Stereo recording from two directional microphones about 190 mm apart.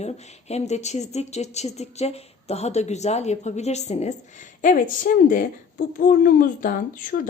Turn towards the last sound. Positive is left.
turn(degrees=45)  # may be behind; listen again after turning